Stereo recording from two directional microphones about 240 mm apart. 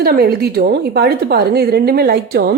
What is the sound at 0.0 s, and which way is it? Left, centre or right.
A woman's voice, right.